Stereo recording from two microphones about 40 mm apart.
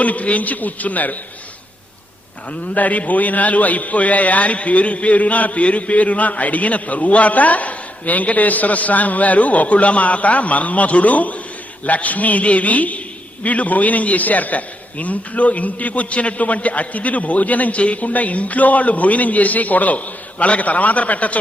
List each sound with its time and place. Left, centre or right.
0.0 s a man's voice: left
2.5 s a man's voice: left